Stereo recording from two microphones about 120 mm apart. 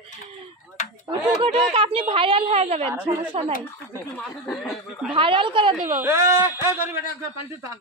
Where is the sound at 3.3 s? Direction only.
55° right (ahead or behind).